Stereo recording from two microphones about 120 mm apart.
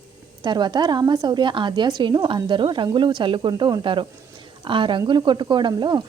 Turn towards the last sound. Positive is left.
turn(degrees=-40)  # may be behind; listen again after turning